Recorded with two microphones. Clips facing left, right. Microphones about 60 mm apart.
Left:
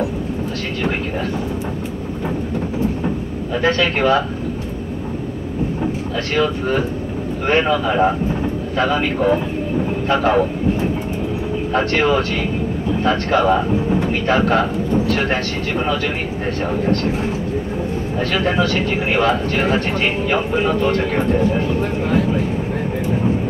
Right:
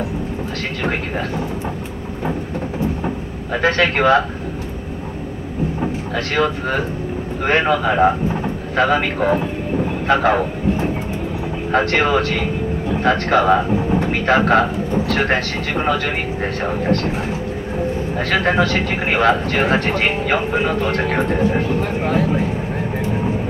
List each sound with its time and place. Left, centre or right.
3.6 s speech: right
6.3 s speech: right
11.7 s speech: right
18.3 s speech: right